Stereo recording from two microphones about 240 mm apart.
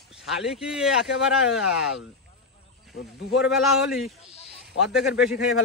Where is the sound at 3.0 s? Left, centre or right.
Left.